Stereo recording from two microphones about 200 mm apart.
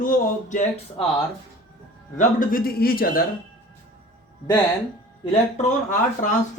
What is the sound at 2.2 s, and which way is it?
Speech, 45° left (ahead or behind).